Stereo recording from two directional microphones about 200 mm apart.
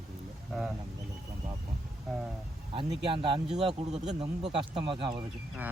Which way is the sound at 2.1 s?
Centre (ahead or behind).